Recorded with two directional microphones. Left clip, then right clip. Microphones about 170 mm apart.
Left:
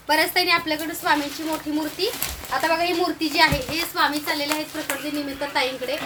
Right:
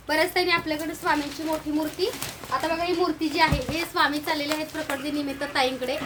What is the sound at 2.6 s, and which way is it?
Speech, 15° left (ahead or behind).